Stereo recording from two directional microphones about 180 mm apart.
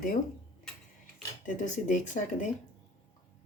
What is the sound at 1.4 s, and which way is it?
Speech, 45° left (ahead or behind).